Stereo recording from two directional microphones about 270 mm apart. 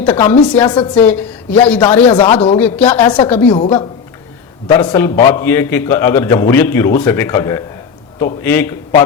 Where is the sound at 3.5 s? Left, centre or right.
Centre.